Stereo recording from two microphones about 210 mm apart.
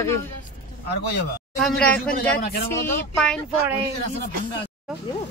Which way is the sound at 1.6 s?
Centre (ahead or behind).